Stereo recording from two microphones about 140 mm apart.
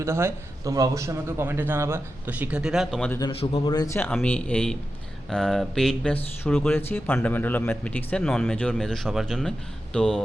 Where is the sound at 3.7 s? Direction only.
25° left (ahead or behind).